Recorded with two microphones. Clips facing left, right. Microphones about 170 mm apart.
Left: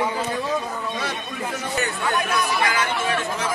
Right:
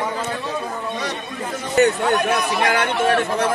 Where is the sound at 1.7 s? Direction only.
65° right (ahead or behind).